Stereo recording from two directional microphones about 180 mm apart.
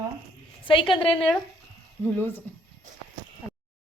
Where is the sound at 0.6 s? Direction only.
30° left (ahead or behind).